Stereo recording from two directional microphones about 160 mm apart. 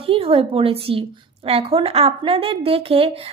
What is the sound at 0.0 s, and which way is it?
A woman's voice, 35° right (ahead or behind).